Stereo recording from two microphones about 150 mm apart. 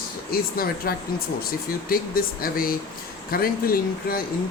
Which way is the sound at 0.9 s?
80° left.